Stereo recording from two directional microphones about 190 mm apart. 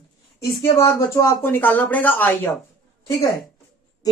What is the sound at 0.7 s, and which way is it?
Speech, 15° left (ahead or behind).